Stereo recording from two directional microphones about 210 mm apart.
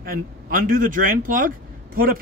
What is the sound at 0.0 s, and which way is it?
Speech, 45° right (ahead or behind).